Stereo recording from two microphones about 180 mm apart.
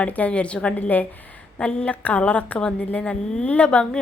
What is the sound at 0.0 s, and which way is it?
A woman's voice, 5° left (ahead or behind).